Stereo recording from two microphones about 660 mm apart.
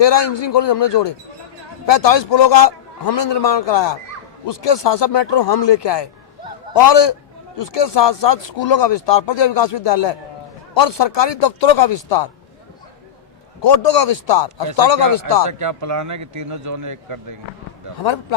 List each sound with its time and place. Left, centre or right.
0.0 s a man's voice: left
13.6 s a man's voice: left
15.4 s a man's voice: right
18.0 s a man's voice: left